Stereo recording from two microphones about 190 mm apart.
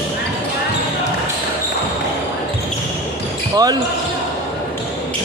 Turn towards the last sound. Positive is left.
turn(degrees=-20)  # may be behind; listen again after turning